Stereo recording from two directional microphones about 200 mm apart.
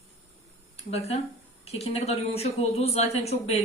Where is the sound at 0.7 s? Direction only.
30° left (ahead or behind).